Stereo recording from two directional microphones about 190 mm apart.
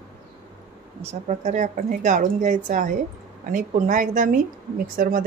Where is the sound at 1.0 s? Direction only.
35° right (ahead or behind).